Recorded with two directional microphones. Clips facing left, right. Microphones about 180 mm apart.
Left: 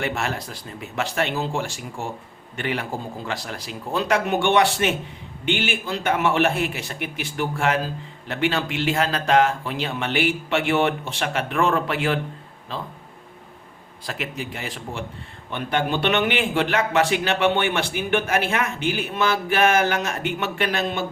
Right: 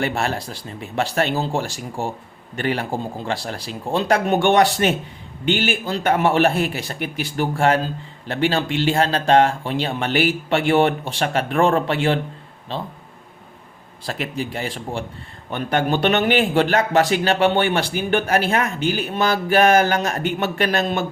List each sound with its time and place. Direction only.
0.0 s a man's voice: 35° right (ahead or behind)
14.1 s a man's voice: 35° right (ahead or behind)
15.4 s a man's voice: 45° right (ahead or behind)